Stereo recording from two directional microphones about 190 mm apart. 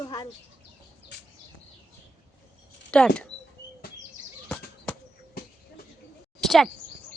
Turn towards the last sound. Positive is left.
turn(degrees=0)  # may be behind; listen again after turning